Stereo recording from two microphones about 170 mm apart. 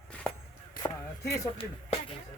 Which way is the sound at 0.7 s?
20° left (ahead or behind).